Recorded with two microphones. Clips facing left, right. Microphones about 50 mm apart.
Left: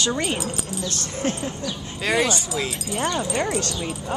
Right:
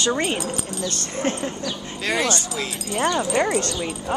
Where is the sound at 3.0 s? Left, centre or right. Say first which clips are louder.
Right 4 dB; centre.